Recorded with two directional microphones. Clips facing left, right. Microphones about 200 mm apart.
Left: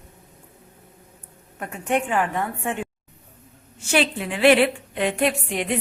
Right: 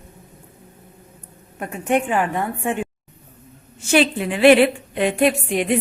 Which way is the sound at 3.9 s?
20° right (ahead or behind).